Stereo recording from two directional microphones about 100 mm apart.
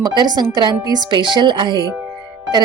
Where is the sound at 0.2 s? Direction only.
45° right (ahead or behind).